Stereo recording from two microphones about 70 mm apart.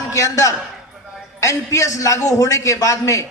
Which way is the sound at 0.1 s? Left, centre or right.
Left.